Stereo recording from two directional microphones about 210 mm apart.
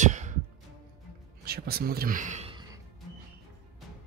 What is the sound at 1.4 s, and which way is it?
Speech, 45° right (ahead or behind).